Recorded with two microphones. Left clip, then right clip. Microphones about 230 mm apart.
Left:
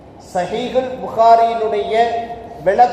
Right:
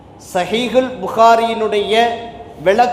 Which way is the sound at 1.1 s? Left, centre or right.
Right.